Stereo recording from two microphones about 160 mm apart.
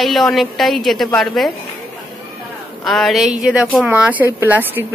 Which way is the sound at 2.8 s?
Centre (ahead or behind).